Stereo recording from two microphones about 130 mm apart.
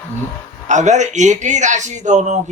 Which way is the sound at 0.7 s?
65° right (ahead or behind).